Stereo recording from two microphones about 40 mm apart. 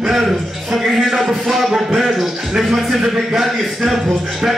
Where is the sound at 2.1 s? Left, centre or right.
Centre.